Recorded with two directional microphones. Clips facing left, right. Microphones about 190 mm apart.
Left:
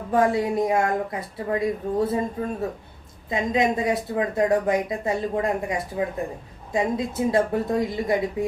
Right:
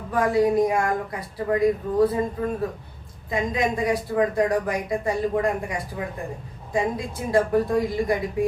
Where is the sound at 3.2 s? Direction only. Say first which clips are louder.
Left 2 dB; 25° left (ahead or behind).